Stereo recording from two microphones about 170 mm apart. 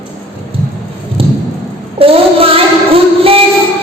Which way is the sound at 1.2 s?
35° right (ahead or behind).